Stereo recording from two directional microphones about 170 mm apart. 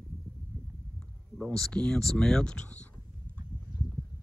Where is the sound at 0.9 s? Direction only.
5° left (ahead or behind).